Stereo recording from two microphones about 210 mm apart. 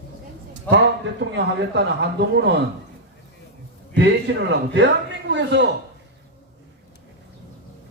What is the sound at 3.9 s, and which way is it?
A man's voice, 55° right (ahead or behind).